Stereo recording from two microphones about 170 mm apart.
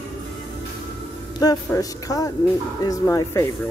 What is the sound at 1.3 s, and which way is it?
Speech, 20° left (ahead or behind).